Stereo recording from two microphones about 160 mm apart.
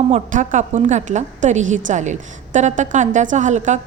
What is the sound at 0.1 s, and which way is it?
A woman's voice, 50° right (ahead or behind).